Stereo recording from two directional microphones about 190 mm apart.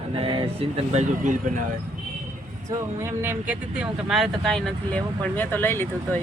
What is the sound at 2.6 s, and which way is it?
Speech, 15° right (ahead or behind).